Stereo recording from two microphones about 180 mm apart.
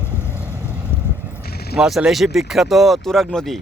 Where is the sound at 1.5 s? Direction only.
60° left (ahead or behind).